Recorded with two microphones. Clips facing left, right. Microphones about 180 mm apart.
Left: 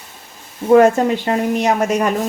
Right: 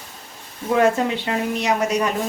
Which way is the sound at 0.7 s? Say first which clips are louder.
Left 6 dB; 45° left (ahead or behind).